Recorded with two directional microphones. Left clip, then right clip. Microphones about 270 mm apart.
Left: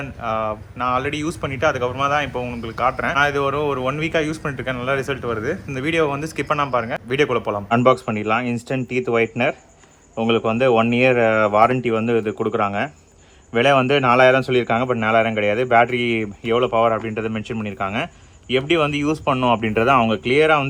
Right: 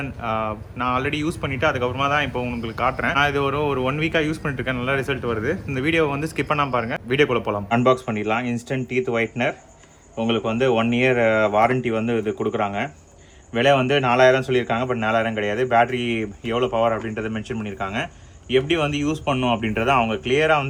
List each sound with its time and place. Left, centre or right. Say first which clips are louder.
0.0 s speech: left 2 dB; centre
7.7 s speech: left 3 dB; centre